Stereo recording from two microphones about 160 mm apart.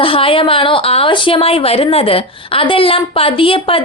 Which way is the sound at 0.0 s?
35° left (ahead or behind).